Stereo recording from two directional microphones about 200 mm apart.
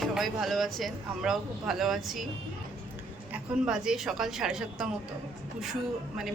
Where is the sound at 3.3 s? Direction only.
5° right (ahead or behind).